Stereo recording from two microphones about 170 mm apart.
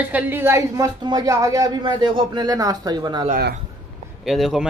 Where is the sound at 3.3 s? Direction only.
70° right (ahead or behind).